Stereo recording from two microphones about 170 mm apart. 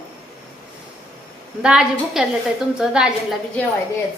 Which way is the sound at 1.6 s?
5° right (ahead or behind).